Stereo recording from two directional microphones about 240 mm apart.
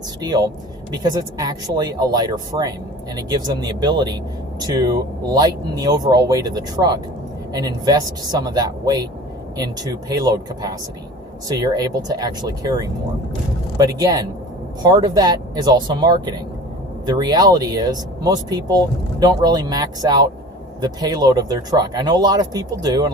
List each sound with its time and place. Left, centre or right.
0.2 s speech: centre